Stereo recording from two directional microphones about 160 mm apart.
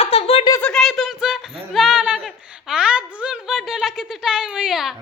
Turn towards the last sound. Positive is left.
turn(degrees=-5)  # may be behind; listen again after turning